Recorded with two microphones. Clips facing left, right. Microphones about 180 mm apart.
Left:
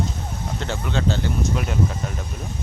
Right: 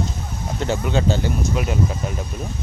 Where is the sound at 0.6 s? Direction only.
10° right (ahead or behind).